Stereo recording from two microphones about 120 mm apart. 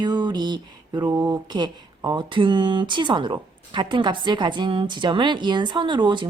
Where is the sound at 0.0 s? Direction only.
35° right (ahead or behind).